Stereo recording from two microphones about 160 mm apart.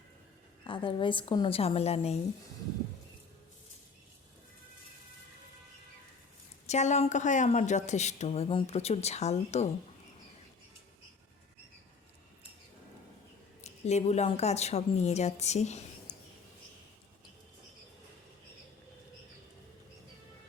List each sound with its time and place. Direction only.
0.7 s a woman's voice: 30° left (ahead or behind)
6.7 s speech: 45° left (ahead or behind)
13.7 s a woman's voice: 45° left (ahead or behind)